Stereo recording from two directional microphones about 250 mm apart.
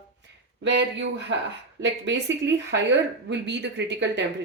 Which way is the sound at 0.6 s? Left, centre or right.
Right.